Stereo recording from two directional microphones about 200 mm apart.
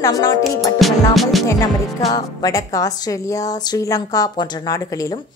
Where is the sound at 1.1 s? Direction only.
Centre (ahead or behind).